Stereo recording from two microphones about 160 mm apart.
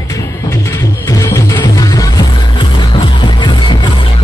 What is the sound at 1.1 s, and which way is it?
Music, 20° left (ahead or behind).